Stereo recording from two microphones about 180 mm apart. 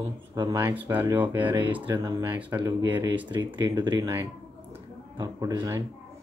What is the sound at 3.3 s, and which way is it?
Speech, 25° right (ahead or behind).